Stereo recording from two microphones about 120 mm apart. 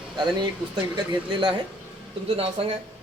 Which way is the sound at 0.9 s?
35° right (ahead or behind).